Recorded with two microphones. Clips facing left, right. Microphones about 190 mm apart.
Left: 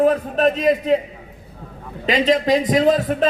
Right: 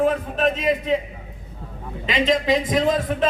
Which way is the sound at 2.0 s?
40° left (ahead or behind).